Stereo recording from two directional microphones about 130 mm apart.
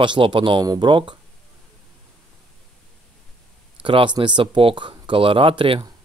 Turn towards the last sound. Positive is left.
turn(degrees=-45)  # may be behind; listen again after turning